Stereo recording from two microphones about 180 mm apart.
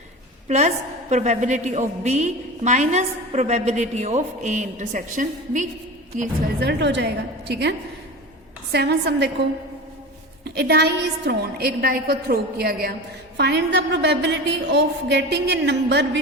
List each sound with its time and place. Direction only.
0.4 s a woman's voice: 40° right (ahead or behind)
6.6 s a woman's voice: 70° right (ahead or behind)
10.5 s a woman's voice: 65° right (ahead or behind)
13.3 s a woman's voice: 70° right (ahead or behind)